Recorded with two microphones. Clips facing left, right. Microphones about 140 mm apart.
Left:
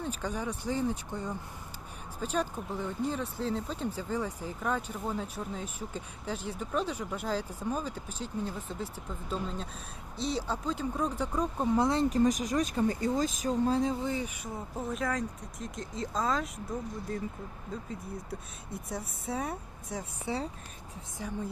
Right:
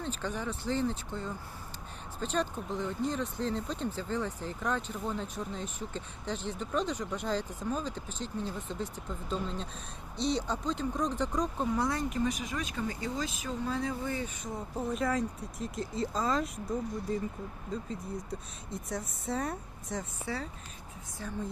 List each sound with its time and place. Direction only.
0.0 s speech: 10° left (ahead or behind)
11.6 s speech: 25° left (ahead or behind)
12.0 s speech: 40° left (ahead or behind)
13.8 s speech: 15° left (ahead or behind)
14.8 s speech: centre (ahead or behind)
21.2 s speech: 15° left (ahead or behind)